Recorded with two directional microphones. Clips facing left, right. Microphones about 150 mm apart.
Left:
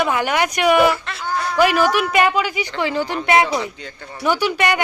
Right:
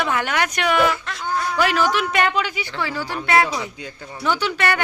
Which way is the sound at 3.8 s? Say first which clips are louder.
Even; 10° right (ahead or behind).